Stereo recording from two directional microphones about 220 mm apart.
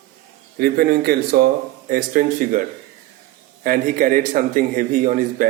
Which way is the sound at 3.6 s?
40° right (ahead or behind).